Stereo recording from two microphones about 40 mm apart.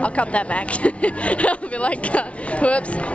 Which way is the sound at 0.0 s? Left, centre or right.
Left.